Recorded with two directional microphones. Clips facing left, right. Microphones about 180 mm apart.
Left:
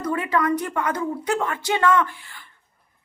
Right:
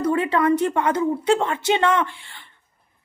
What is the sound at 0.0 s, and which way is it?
A woman's voice, 30° right (ahead or behind).